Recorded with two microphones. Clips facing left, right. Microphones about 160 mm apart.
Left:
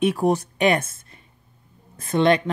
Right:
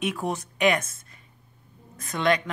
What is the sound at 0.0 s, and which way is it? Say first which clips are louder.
Speech: left 9 dB; 35° left (ahead or behind).